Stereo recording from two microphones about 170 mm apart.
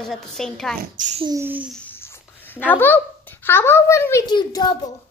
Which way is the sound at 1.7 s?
10° left (ahead or behind).